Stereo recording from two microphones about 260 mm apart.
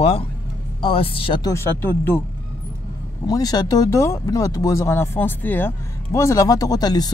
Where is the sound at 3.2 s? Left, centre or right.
Centre.